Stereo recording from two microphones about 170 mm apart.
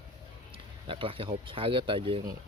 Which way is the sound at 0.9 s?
30° right (ahead or behind).